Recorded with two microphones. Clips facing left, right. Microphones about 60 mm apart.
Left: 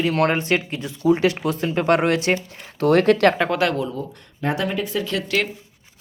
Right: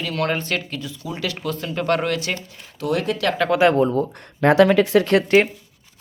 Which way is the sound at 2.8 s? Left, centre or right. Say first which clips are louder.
Left 7 dB; left.